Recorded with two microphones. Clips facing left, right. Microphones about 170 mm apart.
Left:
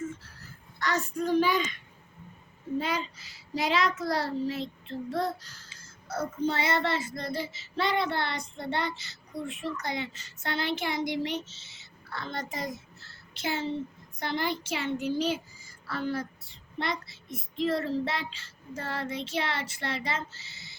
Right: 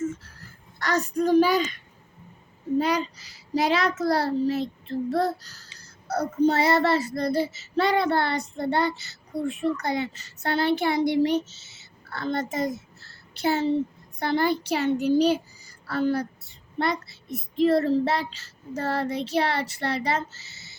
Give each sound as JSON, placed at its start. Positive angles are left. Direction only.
{"t": 0.8, "sound": "a child's voice", "side_deg": -40}
{"t": 2.7, "sound": "a child's voice", "side_deg": -40}